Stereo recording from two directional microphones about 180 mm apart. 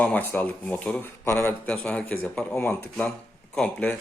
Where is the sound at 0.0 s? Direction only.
10° left (ahead or behind).